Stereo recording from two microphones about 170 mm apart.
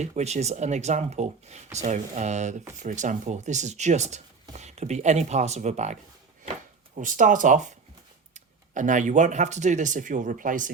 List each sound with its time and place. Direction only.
0.0 s speech: 40° right (ahead or behind)